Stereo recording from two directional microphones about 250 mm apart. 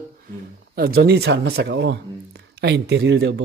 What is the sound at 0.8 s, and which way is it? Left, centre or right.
Speech, right.